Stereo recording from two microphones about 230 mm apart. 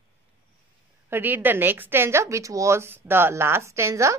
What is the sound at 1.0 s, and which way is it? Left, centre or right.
A woman's voice, centre.